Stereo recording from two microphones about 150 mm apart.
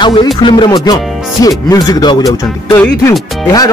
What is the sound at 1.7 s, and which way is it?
Speech, 25° left (ahead or behind).